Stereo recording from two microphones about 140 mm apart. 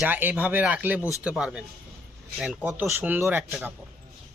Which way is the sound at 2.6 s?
15° right (ahead or behind).